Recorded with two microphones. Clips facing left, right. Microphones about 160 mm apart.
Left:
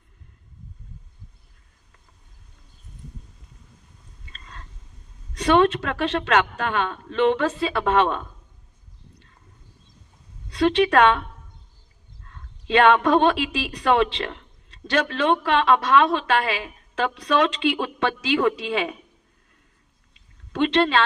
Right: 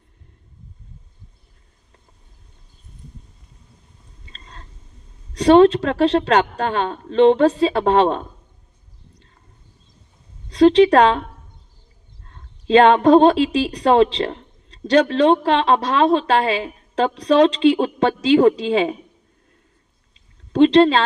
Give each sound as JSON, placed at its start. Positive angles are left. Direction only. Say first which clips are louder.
{"t": 4.3, "sound": "a sound", "louder": "right 1 dB", "side_deg": -35}
{"t": 5.3, "sound": "a woman's voice", "louder": "right 7 dB", "side_deg": -35}
{"t": 10.5, "sound": "a woman's voice", "louder": "right 7 dB", "side_deg": -35}
{"t": 20.5, "sound": "a woman's voice", "louder": "right 8 dB", "side_deg": -35}